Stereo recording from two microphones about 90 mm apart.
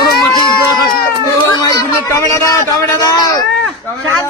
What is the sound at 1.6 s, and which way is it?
A child's voice, 40° left (ahead or behind).